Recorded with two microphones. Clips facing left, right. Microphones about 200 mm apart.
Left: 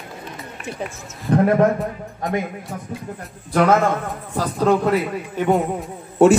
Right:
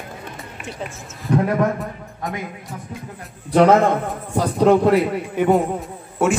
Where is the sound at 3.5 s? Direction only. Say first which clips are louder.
Right 3 dB; 20° right (ahead or behind).